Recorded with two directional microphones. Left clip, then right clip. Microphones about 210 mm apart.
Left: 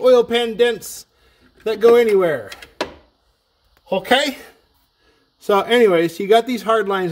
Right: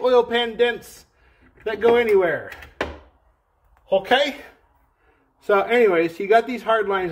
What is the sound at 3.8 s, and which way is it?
Speech, 50° left (ahead or behind).